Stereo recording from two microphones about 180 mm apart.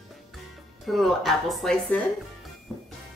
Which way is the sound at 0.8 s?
Centre (ahead or behind).